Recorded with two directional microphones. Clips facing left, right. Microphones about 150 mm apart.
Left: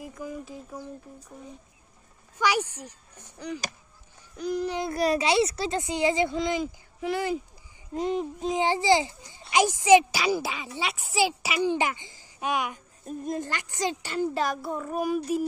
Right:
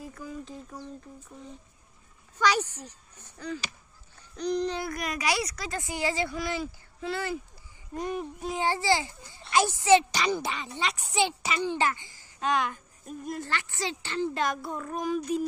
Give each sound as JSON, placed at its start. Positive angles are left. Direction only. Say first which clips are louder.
{"t": 0.0, "sound": "speech", "louder": "left 3 dB", "side_deg": 15}
{"t": 2.3, "sound": "speech", "louder": "even", "side_deg": 10}
{"t": 4.9, "sound": "speech", "louder": "left 7 dB", "side_deg": 30}
{"t": 14.3, "sound": "speech", "louder": "left 2 dB", "side_deg": 0}